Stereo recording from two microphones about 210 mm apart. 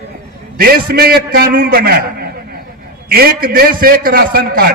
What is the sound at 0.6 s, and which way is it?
A man's voice, 45° right (ahead or behind).